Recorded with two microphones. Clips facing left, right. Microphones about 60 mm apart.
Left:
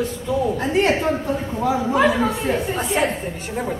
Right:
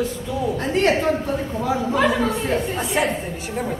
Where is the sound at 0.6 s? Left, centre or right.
Centre.